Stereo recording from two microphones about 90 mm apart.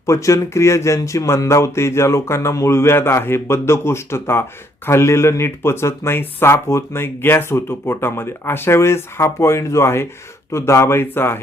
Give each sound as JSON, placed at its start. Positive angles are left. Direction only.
{"t": 0.0, "sound": "speech", "side_deg": 35}